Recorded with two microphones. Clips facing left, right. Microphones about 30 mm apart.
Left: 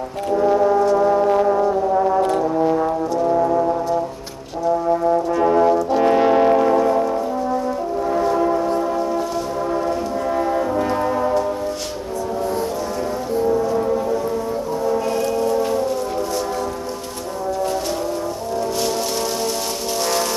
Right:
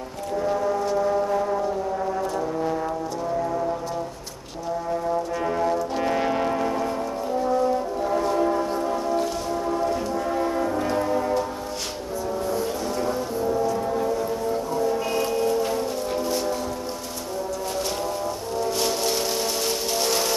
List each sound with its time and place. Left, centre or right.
0.3 s brass instrument: centre
0.9 s music: left
2.4 s brass instrument: centre
4.9 s brass instrument: centre
5.3 s brass instrument: centre
8.5 s church bell: centre
10.3 s music: centre
13.7 s rain: centre
14.8 s music: centre